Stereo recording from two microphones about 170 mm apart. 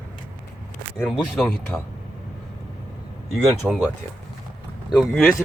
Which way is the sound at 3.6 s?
5° right (ahead or behind).